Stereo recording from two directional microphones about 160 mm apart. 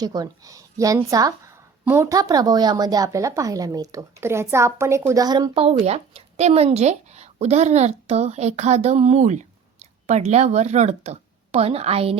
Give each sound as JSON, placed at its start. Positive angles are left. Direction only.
{"t": 0.0, "sound": "a woman's voice", "side_deg": -25}
{"t": 5.6, "sound": "speech", "side_deg": -40}